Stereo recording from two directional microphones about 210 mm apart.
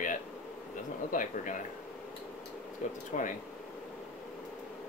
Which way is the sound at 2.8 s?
35° left (ahead or behind).